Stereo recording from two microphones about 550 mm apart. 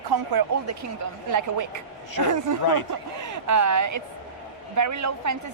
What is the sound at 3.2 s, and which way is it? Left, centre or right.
A woman's voice, right.